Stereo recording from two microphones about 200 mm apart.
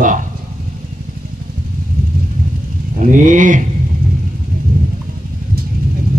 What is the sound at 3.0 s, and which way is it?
Speech, 40° right (ahead or behind).